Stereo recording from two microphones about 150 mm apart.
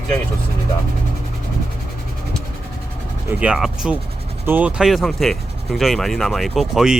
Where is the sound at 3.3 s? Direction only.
5° right (ahead or behind).